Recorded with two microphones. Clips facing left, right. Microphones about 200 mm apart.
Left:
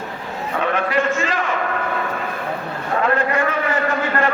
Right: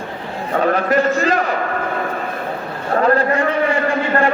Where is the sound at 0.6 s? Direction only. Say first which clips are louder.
Right 4 dB; 40° right (ahead or behind).